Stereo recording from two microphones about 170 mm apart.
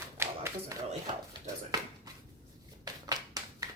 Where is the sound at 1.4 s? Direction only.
20° right (ahead or behind).